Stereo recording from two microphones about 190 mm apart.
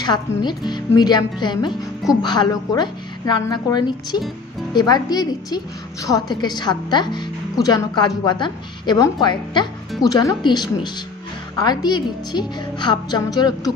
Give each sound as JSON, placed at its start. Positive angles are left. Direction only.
{"t": 0.0, "sound": "a woman's voice", "side_deg": 25}